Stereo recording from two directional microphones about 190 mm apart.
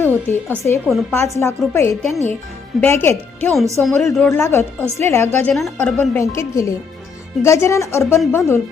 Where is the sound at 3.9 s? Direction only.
Centre (ahead or behind).